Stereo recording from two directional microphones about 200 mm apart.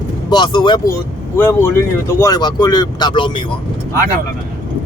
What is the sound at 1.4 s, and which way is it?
Speech, 10° left (ahead or behind).